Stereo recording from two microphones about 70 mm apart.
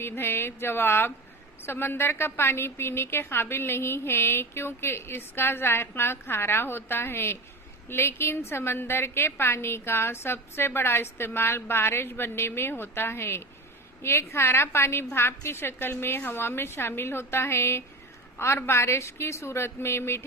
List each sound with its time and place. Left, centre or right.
0.0 s a woman's voice: left